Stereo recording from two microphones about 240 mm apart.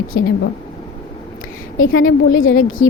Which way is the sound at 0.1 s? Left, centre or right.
Left.